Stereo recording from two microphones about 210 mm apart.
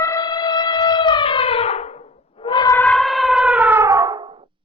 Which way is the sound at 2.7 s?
5° left (ahead or behind).